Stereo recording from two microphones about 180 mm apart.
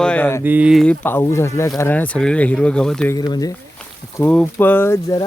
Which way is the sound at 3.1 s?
20° left (ahead or behind).